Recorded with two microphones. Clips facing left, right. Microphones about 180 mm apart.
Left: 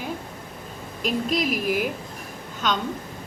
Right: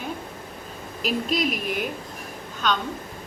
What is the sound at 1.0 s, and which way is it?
Speech, centre (ahead or behind).